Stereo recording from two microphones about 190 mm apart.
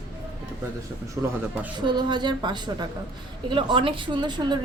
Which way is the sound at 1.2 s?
15° right (ahead or behind).